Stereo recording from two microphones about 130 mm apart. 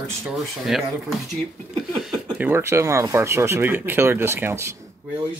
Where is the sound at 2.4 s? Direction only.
15° right (ahead or behind).